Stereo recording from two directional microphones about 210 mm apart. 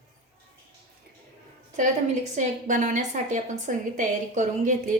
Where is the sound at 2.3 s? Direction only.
35° right (ahead or behind).